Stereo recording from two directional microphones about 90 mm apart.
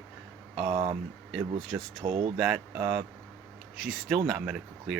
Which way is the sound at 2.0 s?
75° right (ahead or behind).